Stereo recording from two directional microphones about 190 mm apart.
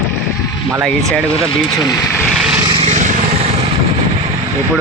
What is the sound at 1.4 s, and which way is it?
Speech, 25° left (ahead or behind).